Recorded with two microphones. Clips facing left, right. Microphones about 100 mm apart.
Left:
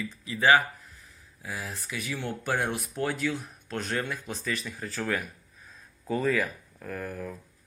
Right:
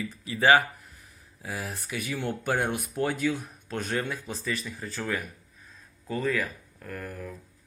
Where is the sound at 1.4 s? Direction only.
15° right (ahead or behind).